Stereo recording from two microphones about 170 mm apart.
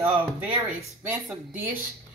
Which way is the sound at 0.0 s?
10° right (ahead or behind).